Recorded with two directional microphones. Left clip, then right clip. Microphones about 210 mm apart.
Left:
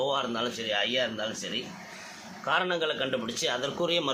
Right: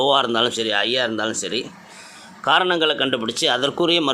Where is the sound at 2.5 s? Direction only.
45° right (ahead or behind).